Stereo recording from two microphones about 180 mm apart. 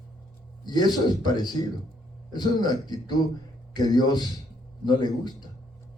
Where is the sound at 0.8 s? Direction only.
25° left (ahead or behind).